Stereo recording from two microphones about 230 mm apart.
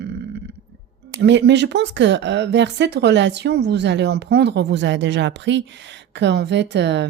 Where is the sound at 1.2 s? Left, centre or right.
Right.